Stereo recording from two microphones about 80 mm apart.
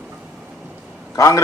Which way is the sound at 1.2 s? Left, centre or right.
Left.